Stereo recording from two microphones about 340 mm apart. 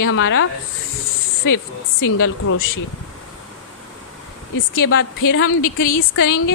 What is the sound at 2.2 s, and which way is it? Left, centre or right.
Speech, left.